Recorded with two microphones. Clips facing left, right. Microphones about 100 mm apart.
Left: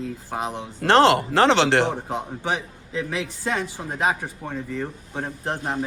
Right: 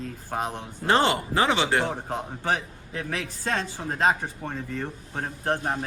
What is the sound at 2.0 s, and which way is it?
Speech, 15° left (ahead or behind).